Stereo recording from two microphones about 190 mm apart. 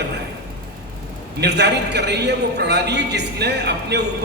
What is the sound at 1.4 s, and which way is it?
A man's voice, 60° right (ahead or behind).